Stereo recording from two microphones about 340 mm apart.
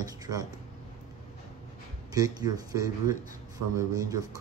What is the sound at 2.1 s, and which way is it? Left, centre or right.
Speech, centre.